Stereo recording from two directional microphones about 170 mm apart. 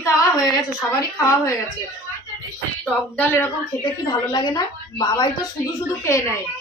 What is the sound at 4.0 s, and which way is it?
A woman's voice, 25° left (ahead or behind).